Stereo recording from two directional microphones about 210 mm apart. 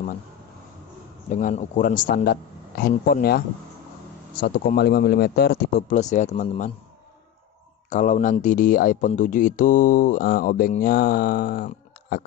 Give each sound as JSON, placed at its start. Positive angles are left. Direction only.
{"t": 1.3, "sound": "speech", "side_deg": 35}
{"t": 7.9, "sound": "speech", "side_deg": 35}